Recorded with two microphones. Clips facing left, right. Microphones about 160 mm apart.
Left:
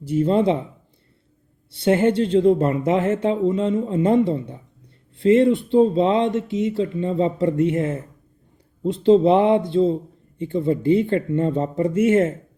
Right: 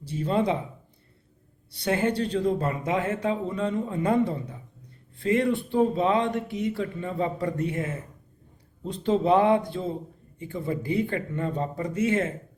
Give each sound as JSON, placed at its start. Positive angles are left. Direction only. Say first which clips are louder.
{"t": 0.2, "sound": "speech", "louder": "left 6 dB", "side_deg": 25}
{"t": 1.7, "sound": "speech", "louder": "left 8 dB", "side_deg": 25}
{"t": 5.2, "sound": "speech", "louder": "left 8 dB", "side_deg": 25}